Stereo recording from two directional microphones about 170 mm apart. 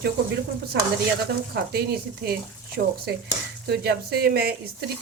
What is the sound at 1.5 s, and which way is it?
Speech, 65° right (ahead or behind).